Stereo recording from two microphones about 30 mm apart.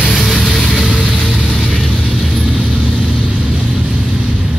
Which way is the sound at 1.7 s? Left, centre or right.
Centre.